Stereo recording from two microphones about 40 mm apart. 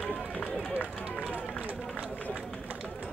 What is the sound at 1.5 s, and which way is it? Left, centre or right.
Run, left.